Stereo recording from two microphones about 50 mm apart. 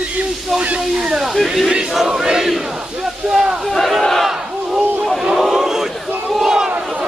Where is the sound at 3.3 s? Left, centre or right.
Centre.